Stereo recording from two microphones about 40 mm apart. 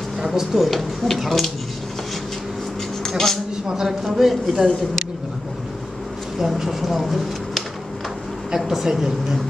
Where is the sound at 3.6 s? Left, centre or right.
Centre.